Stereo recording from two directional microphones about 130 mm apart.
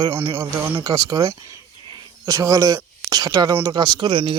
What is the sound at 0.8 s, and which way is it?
Cricket, 25° right (ahead or behind).